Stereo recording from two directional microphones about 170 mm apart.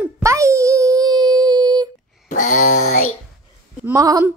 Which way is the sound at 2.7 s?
45° left (ahead or behind).